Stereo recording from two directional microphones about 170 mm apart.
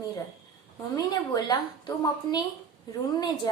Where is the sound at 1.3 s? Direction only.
25° left (ahead or behind).